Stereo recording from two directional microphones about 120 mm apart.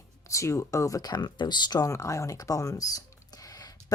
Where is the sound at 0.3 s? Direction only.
25° left (ahead or behind).